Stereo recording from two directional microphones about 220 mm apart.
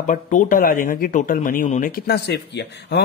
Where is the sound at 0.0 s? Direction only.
35° left (ahead or behind).